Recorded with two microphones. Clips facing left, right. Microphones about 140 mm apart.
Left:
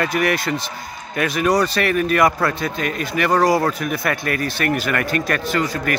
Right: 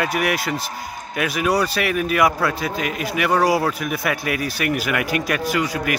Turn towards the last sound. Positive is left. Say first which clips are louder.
# even
turn(degrees=-10)  # may be behind; listen again after turning